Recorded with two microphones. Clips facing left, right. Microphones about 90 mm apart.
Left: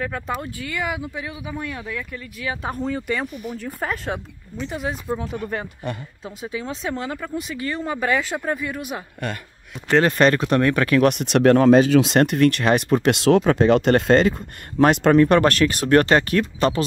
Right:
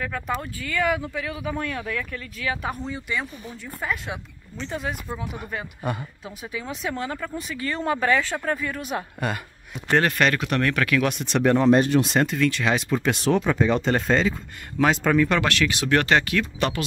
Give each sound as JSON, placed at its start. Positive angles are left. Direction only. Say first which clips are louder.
{"t": 0.4, "sound": "speech", "louder": "right 2 dB", "side_deg": 20}
{"t": 2.8, "sound": "speech", "louder": "left 5 dB", "side_deg": 50}
{"t": 4.6, "sound": "speech", "louder": "left 2 dB", "side_deg": 10}
{"t": 5.2, "sound": "speech", "louder": "left 5 dB", "side_deg": -10}
{"t": 6.2, "sound": "speech", "louder": "left 5 dB", "side_deg": 25}
{"t": 8.9, "sound": "speech", "louder": "right 2 dB", "side_deg": -5}
{"t": 10.0, "sound": "speech", "louder": "left 5 dB", "side_deg": 30}
{"t": 11.0, "sound": "speech", "louder": "left 6 dB", "side_deg": 60}